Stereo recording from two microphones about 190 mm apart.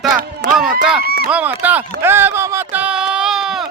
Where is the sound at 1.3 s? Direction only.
10° right (ahead or behind).